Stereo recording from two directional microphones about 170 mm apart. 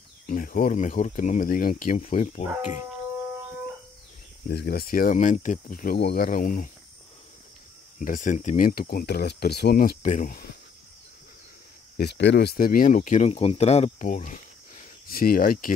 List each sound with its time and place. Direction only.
0.3 s speech: 55° left (ahead or behind)
4.5 s speech: 70° left (ahead or behind); by 5.9 s 55° left (ahead or behind)
5.9 s speech: 65° left (ahead or behind)
8.0 s speech: 50° left (ahead or behind)
12.0 s speech: 85° left; by 15.7 s 55° left (ahead or behind)